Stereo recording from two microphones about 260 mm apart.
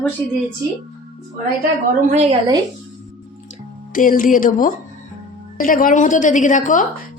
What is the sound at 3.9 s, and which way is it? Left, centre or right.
A woman's voice, left.